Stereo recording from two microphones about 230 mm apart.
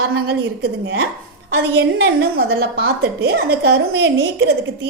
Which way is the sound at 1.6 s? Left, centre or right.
Right.